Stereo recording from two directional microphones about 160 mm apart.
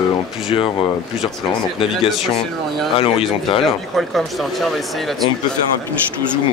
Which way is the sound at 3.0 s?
35° left (ahead or behind).